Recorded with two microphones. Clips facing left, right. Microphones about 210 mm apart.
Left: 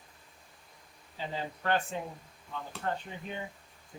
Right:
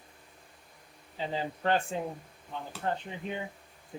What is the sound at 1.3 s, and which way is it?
Speech, 30° right (ahead or behind).